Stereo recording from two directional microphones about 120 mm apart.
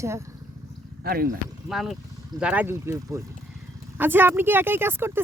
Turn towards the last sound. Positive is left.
turn(degrees=-20)  # may be behind; listen again after turning